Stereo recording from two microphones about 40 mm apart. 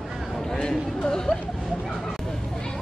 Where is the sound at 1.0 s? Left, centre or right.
Centre.